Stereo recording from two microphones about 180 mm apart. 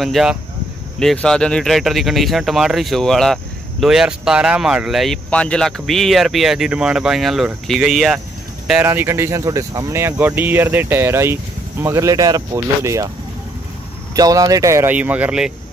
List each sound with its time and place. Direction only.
0.0 s speech: centre (ahead or behind); by 13.1 s 20° right (ahead or behind)
14.1 s speech: 20° right (ahead or behind)